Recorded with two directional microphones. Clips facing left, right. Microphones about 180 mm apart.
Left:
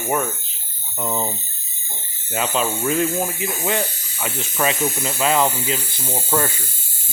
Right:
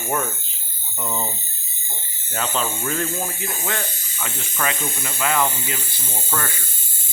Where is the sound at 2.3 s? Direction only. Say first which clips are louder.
Left 3 dB; 10° left (ahead or behind).